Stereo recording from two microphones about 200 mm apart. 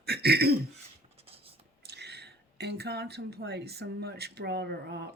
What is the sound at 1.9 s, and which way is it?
Speech, 55° right (ahead or behind).